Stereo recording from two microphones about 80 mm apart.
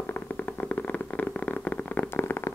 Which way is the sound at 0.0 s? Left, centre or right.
Left.